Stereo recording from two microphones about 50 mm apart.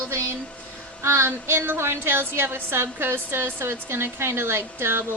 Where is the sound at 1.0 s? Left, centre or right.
Right.